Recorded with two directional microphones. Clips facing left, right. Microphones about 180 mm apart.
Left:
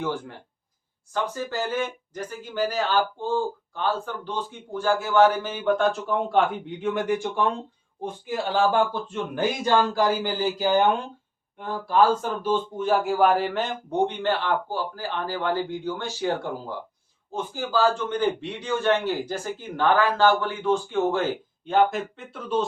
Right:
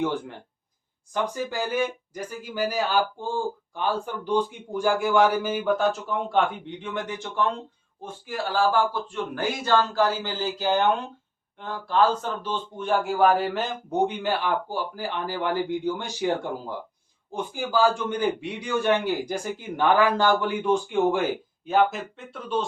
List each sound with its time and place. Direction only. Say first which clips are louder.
0.0 s speech: right 2 dB; 15° right (ahead or behind); by 7.4 s 10° left (ahead or behind)
8.0 s speech: left 3 dB; 20° left (ahead or behind); by 22.6 s centre (ahead or behind)